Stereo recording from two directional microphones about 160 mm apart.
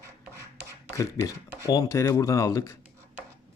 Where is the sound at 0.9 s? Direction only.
20° left (ahead or behind).